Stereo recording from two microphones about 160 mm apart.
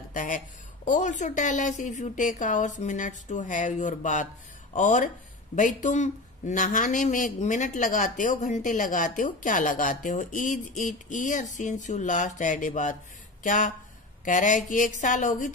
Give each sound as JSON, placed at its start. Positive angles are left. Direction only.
{"t": 0.1, "sound": "speech", "side_deg": 55}